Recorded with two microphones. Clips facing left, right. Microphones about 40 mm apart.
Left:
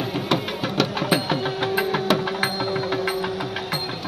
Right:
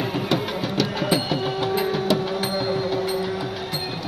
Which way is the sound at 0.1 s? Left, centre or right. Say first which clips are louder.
Even; left.